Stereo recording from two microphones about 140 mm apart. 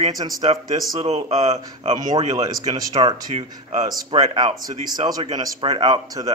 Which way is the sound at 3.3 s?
55° right (ahead or behind).